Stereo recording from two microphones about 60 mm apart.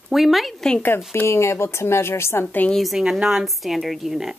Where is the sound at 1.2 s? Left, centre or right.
Left.